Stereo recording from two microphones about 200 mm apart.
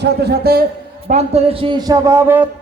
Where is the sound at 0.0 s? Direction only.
55° right (ahead or behind).